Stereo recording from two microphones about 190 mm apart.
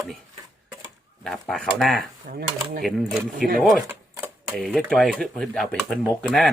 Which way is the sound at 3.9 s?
10° right (ahead or behind).